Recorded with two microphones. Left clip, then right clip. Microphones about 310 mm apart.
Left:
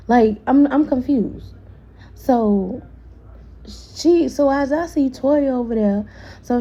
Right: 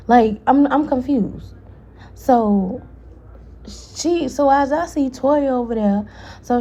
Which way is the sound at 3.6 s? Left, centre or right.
Centre.